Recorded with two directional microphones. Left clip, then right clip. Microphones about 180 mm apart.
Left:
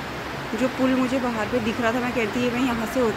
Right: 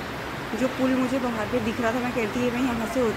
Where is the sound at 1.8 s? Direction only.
Centre (ahead or behind).